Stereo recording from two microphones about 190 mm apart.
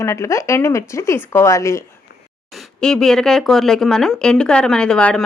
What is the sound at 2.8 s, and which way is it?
Speech, 5° left (ahead or behind).